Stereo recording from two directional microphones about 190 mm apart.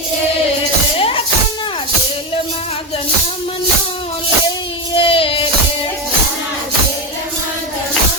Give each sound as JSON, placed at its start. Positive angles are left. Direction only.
{"t": 0.9, "sound": "music", "side_deg": 30}
{"t": 4.9, "sound": "child singing", "side_deg": 30}